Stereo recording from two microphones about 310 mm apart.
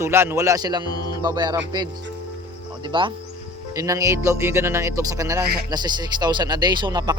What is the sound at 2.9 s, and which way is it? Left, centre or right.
A man's voice, centre.